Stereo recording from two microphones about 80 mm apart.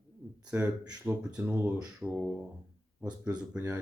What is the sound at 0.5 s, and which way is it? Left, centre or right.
Speech, right.